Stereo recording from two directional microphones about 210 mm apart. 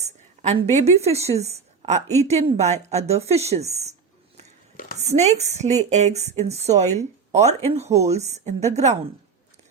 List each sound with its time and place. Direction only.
0.0 s a sound: 30° right (ahead or behind)
1.0 s a woman's voice: 30° right (ahead or behind)
5.0 s speech: 30° right (ahead or behind)